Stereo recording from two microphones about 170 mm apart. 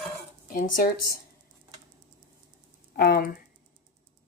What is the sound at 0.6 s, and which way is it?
Speech, 60° left (ahead or behind).